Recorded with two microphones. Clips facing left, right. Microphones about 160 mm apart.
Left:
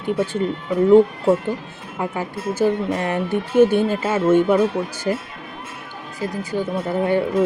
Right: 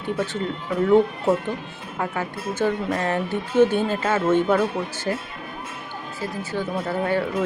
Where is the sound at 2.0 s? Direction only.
15° left (ahead or behind).